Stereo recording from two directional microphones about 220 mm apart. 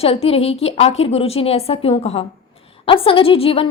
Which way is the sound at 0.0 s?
25° left (ahead or behind).